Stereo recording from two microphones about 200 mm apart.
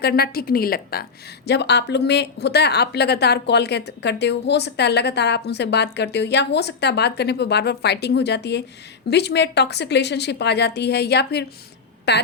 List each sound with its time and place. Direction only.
0.0 s a woman's voice: 50° left (ahead or behind)